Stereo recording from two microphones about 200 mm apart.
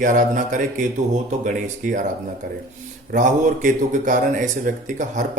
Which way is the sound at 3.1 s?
40° right (ahead or behind).